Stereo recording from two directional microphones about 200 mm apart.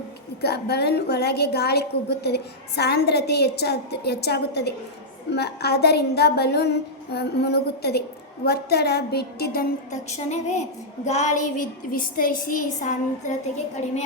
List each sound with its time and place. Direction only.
0.4 s a woman's voice: 55° left (ahead or behind)
9.9 s a woman's voice: 35° left (ahead or behind)